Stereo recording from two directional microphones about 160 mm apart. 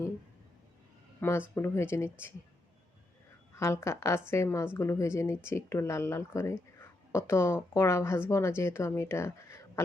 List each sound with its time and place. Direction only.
1.2 s speech: 15° left (ahead or behind)
3.5 s speech: 15° left (ahead or behind)